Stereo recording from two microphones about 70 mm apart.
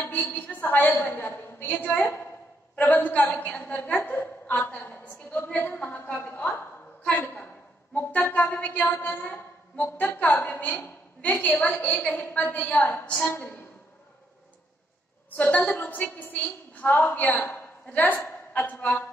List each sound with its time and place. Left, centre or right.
0.1 s a woman's voice: left
13.2 s a woman's voice: left
15.3 s a woman's voice: left